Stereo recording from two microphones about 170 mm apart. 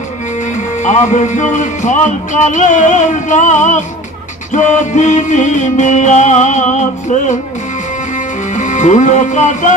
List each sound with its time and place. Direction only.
0.8 s music: 45° left (ahead or behind)
8.5 s music: 45° left (ahead or behind)